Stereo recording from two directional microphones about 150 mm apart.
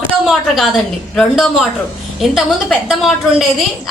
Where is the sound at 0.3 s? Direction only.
Centre (ahead or behind).